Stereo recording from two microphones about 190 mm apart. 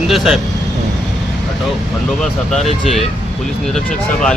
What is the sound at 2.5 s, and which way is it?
Speech, centre (ahead or behind).